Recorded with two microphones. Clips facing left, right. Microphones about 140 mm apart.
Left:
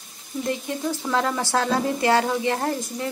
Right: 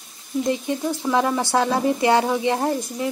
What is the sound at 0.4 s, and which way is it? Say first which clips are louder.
Speech: right 4 dB; 15° right (ahead or behind).